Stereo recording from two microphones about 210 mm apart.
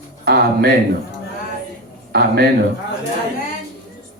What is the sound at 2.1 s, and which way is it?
Speech, 50° right (ahead or behind).